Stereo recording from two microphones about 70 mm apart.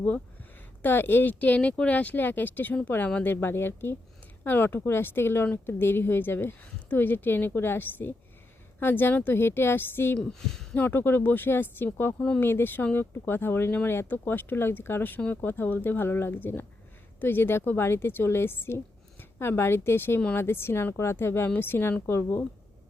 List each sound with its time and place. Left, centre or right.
0.8 s speech: left
10.2 s speech: centre
10.8 s speech: left